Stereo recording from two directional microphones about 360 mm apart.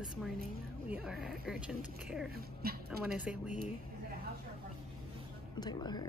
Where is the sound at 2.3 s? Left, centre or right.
Right.